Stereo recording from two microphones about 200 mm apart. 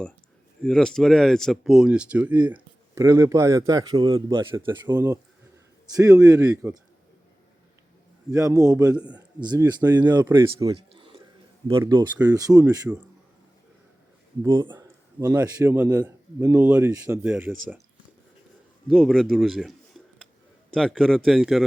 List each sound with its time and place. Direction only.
0.6 s a man's voice: 5° left (ahead or behind); by 6.7 s 15° right (ahead or behind)
8.3 s a man's voice: 15° right (ahead or behind)
12.9 s speech: 5° right (ahead or behind)
14.4 s a man's voice: 25° right (ahead or behind); by 17.7 s 10° right (ahead or behind)
18.9 s speech: centre (ahead or behind)